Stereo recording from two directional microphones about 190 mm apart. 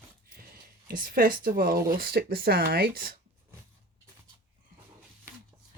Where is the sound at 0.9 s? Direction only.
50° right (ahead or behind).